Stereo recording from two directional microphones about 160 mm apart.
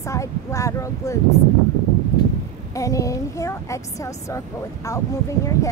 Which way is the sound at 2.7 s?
20° left (ahead or behind).